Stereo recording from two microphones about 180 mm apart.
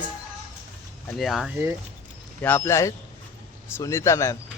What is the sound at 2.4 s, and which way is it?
A man's voice, 15° left (ahead or behind).